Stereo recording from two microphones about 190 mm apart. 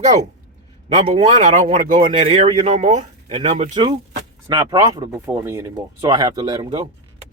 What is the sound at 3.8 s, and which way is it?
A man's voice, 25° right (ahead or behind).